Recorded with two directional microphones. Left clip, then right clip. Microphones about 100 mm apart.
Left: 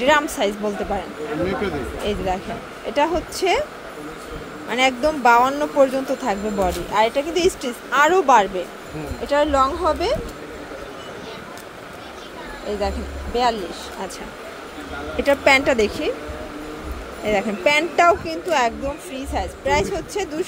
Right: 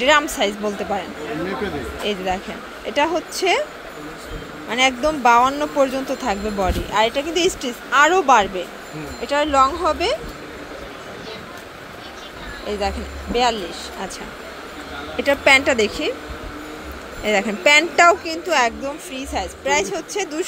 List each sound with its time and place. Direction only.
0.0 s speech: 5° right (ahead or behind)
2.0 s speech: 5° right (ahead or behind)
4.6 s speech: 15° left (ahead or behind)
6.6 s speech: 5° left (ahead or behind)
12.6 s speech: 5° right (ahead or behind)
15.1 s speech: 10° left (ahead or behind)
17.2 s speech: 15° right (ahead or behind)